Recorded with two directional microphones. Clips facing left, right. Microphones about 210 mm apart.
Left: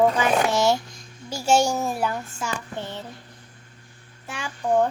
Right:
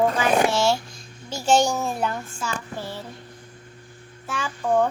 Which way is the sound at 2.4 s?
20° left (ahead or behind).